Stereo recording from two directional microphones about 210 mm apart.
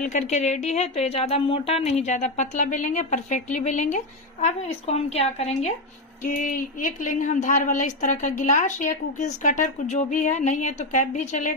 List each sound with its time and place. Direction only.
0.0 s a woman's voice: 35° left (ahead or behind)